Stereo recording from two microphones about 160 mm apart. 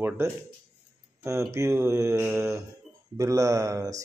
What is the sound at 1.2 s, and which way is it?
A man's voice, 20° right (ahead or behind).